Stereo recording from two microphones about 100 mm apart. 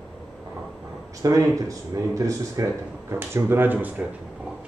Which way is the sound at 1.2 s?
35° right (ahead or behind).